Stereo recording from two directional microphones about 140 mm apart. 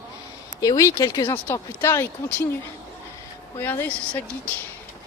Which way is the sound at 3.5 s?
15° left (ahead or behind).